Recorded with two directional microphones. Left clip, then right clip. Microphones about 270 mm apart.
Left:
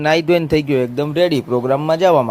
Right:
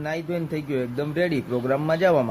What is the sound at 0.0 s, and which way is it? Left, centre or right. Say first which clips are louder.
A man's voice: left 14 dB; left.